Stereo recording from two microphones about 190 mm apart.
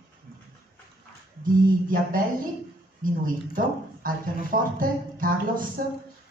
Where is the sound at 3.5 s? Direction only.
45° right (ahead or behind).